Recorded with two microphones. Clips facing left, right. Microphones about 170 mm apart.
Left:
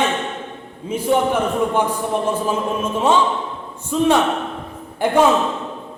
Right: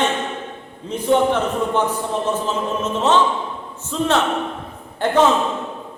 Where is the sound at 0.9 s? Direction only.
10° left (ahead or behind).